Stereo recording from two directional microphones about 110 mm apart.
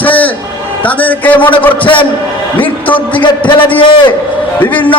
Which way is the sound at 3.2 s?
45° left (ahead or behind).